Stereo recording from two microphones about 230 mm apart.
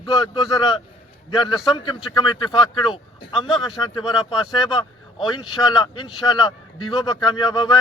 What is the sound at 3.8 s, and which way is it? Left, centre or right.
A man's voice, centre.